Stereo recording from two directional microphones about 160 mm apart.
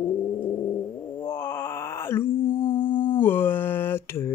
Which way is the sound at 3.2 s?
15° left (ahead or behind).